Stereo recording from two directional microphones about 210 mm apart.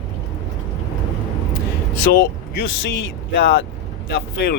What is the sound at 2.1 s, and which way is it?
Speech, 50° left (ahead or behind).